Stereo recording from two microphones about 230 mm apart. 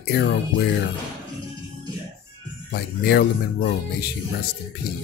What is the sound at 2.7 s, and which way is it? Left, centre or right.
Speech, left.